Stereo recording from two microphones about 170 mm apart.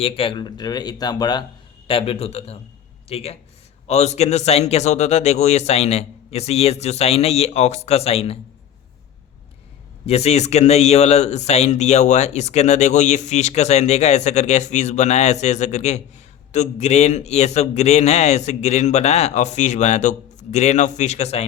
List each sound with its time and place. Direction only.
0.0 s speech: 30° left (ahead or behind)
10.1 s speech: 40° left (ahead or behind)